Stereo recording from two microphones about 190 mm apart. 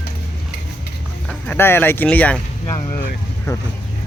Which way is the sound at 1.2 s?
5° left (ahead or behind).